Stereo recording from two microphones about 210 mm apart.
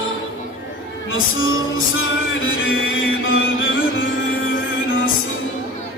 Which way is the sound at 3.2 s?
70° left (ahead or behind).